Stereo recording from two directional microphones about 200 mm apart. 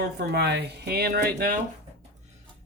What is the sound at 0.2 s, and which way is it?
Speech, 55° right (ahead or behind).